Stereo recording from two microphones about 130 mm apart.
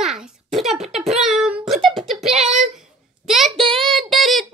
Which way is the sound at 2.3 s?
55° right (ahead or behind).